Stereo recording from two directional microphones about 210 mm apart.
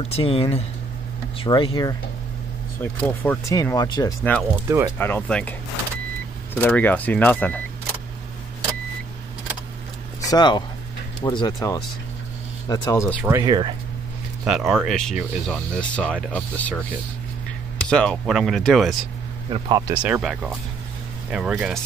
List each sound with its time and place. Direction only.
0.1 s speech: 25° left (ahead or behind)
2.8 s speech: 10° left (ahead or behind)
4.2 s speech: 5° left (ahead or behind)
4.6 s speech: 10° right (ahead or behind)
4.9 s speech: 10° left (ahead or behind)
6.6 s speech: 10° left (ahead or behind)
10.2 s speech: 20° left (ahead or behind)
13.0 s speech: 5° right (ahead or behind)
13.3 s speech: 20° right (ahead or behind)
14.5 s speech: centre (ahead or behind)
17.8 s speech: 5° left (ahead or behind)